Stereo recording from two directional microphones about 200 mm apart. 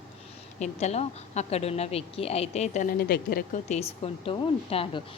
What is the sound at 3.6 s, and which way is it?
Speech, 35° left (ahead or behind).